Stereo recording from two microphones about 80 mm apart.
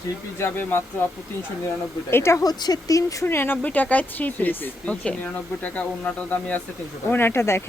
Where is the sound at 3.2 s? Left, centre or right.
Left.